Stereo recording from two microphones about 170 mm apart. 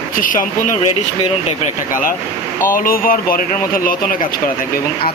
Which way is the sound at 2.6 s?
55° left (ahead or behind).